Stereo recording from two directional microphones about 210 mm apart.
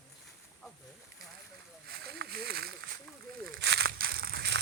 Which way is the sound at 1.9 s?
50° right (ahead or behind).